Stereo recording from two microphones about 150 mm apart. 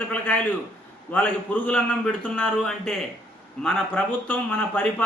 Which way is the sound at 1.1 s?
10° left (ahead or behind).